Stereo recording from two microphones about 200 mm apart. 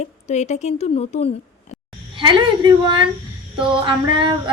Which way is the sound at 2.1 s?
25° right (ahead or behind).